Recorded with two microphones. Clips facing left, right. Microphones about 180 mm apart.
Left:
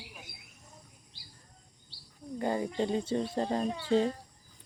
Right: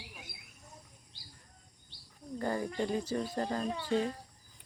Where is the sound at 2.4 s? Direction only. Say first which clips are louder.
Left 3 dB; 20° left (ahead or behind).